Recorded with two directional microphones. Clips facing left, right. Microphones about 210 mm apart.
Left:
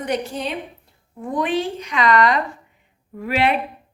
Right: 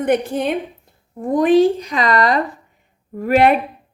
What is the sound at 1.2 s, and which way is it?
A woman's voice, 40° right (ahead or behind).